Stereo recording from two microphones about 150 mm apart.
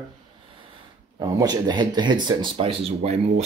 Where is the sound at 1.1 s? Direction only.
25° right (ahead or behind).